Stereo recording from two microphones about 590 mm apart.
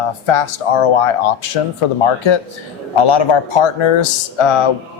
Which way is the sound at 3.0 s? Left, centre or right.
Left.